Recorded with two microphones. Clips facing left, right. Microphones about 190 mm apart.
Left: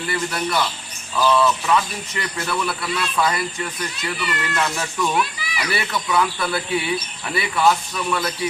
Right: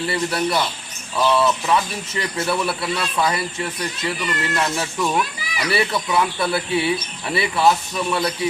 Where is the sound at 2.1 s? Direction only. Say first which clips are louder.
Right 3 dB; 30° right (ahead or behind).